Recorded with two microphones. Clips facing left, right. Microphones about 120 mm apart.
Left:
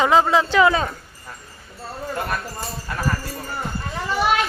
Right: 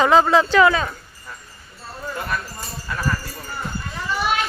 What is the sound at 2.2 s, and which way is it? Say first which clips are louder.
Speech: left 1 dB; 50° left (ahead or behind).